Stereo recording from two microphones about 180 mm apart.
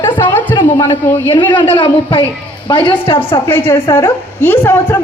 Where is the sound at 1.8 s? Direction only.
30° left (ahead or behind).